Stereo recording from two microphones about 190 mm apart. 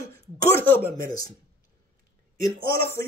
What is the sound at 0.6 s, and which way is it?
Speech, 10° left (ahead or behind).